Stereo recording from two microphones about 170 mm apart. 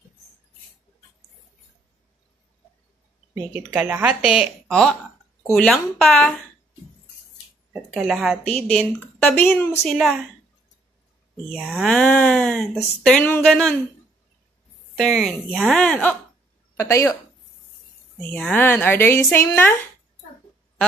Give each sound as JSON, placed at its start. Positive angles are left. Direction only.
{"t": 3.5, "sound": "a woman's voice", "side_deg": -10}
{"t": 7.9, "sound": "a woman's voice", "side_deg": -5}
{"t": 9.8, "sound": "a woman's voice", "side_deg": 0}
{"t": 11.5, "sound": "a woman's voice", "side_deg": 0}
{"t": 15.0, "sound": "a woman's voice", "side_deg": 5}
{"t": 16.7, "sound": "speech", "side_deg": 15}
{"t": 18.3, "sound": "speech", "side_deg": 10}